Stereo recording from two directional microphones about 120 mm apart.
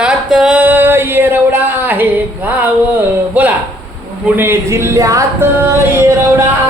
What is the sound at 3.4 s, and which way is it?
Speech, 10° right (ahead or behind).